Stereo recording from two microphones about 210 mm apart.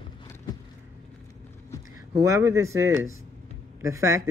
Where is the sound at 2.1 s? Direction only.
15° right (ahead or behind).